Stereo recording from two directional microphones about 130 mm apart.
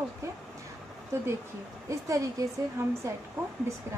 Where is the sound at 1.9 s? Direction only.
25° right (ahead or behind).